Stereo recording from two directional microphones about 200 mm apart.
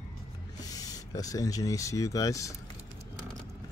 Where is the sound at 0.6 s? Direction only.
20° left (ahead or behind).